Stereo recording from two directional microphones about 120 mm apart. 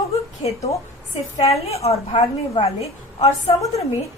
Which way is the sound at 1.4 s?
60° left (ahead or behind).